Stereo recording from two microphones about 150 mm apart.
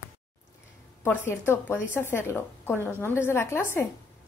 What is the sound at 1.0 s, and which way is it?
A woman's voice, 15° left (ahead or behind).